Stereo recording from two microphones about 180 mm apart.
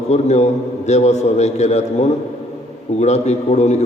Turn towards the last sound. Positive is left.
turn(degrees=40)  # may be behind; listen again after turning